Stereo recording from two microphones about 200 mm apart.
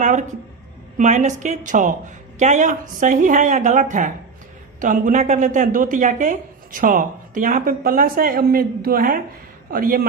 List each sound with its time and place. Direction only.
0.0 s a man's voice: 40° right (ahead or behind)